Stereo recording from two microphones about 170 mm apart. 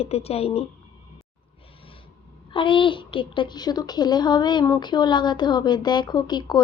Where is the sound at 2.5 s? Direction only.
30° left (ahead or behind).